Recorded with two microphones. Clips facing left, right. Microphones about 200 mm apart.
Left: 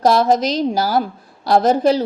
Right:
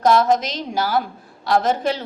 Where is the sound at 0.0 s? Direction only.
35° left (ahead or behind).